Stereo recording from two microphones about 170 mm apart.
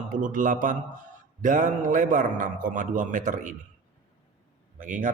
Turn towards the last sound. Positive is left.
turn(degrees=-50)  # may be behind; listen again after turning